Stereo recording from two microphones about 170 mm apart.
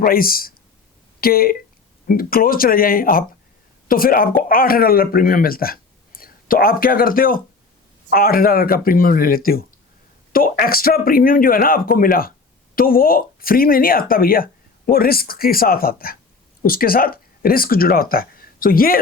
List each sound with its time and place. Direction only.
0.0 s speech: 60° left (ahead or behind)